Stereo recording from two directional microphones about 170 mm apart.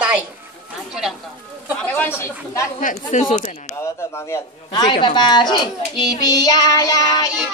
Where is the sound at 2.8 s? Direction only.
50° left (ahead or behind).